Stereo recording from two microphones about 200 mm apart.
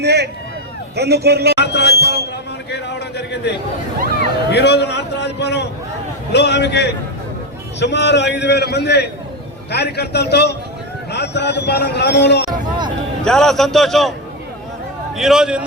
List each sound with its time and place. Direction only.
0.0 s a man's voice: 55° right (ahead or behind)
1.5 s a sound: 55° left (ahead or behind)
2.6 s a man's voice: 60° left (ahead or behind)
4.5 s a man's voice: 55° left (ahead or behind)
13.2 s a man's voice: centre (ahead or behind)
15.1 s a man's voice: centre (ahead or behind)